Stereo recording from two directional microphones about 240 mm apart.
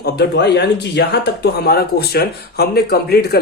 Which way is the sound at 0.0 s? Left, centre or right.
Left.